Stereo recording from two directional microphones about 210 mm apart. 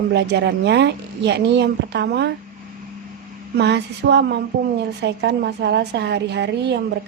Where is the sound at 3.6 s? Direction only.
55° right (ahead or behind).